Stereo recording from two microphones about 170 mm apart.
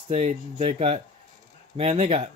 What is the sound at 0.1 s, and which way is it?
Speech, 35° right (ahead or behind).